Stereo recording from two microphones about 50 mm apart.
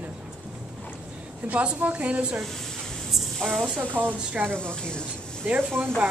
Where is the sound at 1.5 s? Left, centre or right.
Right.